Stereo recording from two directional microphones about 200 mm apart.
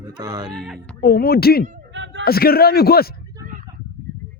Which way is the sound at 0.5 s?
Centre (ahead or behind).